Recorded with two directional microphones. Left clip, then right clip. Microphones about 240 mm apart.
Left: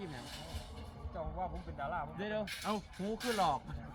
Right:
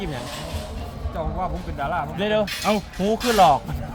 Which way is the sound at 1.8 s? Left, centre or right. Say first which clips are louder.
Right 14 dB; centre.